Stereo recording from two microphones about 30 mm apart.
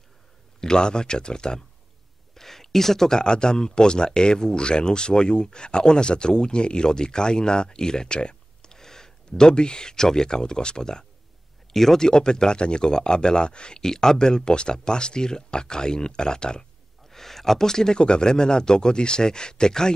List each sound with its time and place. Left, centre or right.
0.6 s speech: left
2.3 s a sound: centre
3.2 s speech: left
8.7 s speech: centre
11.7 s speech: centre
12.1 s speech: left
13.7 s speech: centre
17.1 s speech: centre
17.9 s speech: left